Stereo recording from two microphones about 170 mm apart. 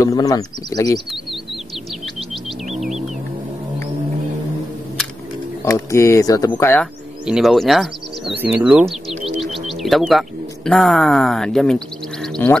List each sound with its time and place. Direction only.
0.0 s speech: 20° left (ahead or behind)
5.7 s speech: 20° left (ahead or behind)
6.8 s speech: centre (ahead or behind)
9.4 s music: centre (ahead or behind)